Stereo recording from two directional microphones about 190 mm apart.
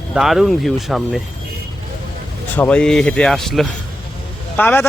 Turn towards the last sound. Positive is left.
turn(degrees=10)  # may be behind; listen again after turning